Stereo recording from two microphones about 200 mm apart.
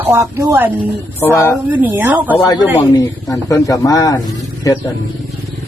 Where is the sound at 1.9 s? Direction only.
10° right (ahead or behind).